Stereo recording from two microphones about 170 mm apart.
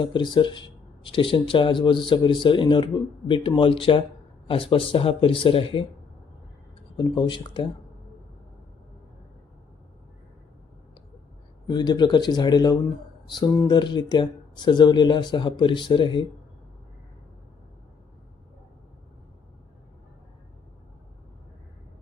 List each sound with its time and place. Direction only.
0.0 s speech: 25° left (ahead or behind)
6.9 s speech: 25° left (ahead or behind)
11.7 s speech: 25° left (ahead or behind)